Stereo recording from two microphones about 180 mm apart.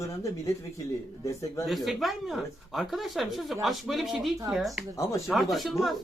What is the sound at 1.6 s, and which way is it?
Speech, centre (ahead or behind).